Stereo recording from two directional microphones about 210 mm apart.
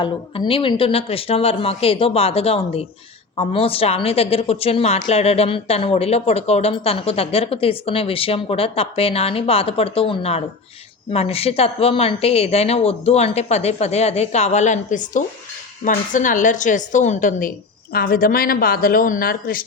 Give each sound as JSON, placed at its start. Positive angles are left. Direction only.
{"t": 0.0, "sound": "a woman's voice", "side_deg": 25}